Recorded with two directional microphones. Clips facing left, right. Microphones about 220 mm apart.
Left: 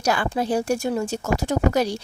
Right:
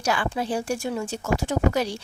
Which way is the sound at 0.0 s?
40° left (ahead or behind).